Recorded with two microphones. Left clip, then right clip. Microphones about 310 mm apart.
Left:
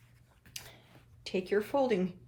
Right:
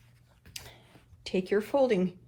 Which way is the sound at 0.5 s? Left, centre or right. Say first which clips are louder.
Right 2 dB; right.